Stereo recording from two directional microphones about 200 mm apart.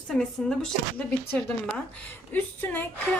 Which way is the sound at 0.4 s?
5° left (ahead or behind).